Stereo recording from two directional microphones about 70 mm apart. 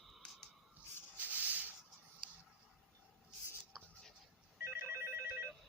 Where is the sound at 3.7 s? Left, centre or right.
Centre.